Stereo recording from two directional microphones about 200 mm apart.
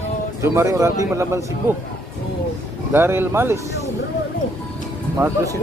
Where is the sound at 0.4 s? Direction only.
15° right (ahead or behind).